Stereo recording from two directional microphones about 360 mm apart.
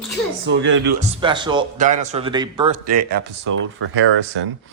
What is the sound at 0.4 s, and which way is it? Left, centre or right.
Speech, right.